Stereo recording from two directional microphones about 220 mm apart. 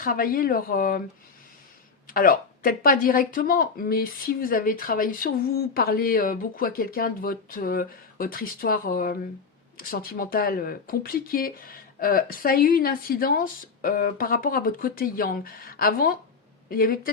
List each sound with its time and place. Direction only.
0.0 s speech: 40° left (ahead or behind)
2.0 s speech: 40° left (ahead or behind)